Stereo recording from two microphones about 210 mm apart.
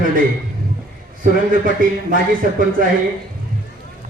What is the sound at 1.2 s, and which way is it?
A man's voice, 40° right (ahead or behind).